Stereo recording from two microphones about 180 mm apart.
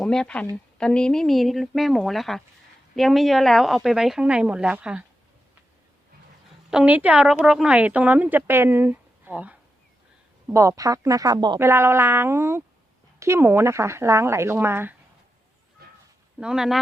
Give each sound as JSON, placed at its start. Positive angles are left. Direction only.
{"t": 0.0, "sound": "speech", "side_deg": 5}
{"t": 6.7, "sound": "speech", "side_deg": -5}
{"t": 15.8, "sound": "a sound", "side_deg": -55}
{"t": 16.4, "sound": "speech", "side_deg": -5}